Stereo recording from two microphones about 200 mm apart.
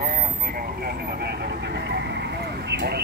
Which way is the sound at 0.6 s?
50° right (ahead or behind).